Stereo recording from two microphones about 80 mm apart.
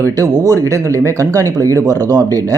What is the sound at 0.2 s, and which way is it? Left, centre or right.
A man's voice, right.